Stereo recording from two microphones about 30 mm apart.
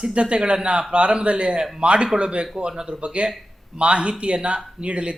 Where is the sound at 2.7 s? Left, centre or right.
Right.